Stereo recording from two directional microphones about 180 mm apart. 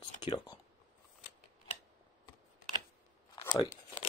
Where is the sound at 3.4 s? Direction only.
25° left (ahead or behind).